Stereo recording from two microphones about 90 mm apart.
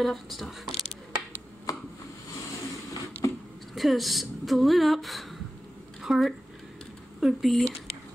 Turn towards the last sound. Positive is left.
turn(degrees=0)  # may be behind; listen again after turning